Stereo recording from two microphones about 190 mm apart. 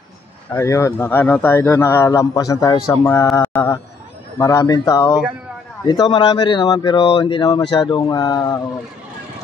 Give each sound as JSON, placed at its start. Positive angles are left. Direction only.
{"t": 0.5, "sound": "speech", "side_deg": 15}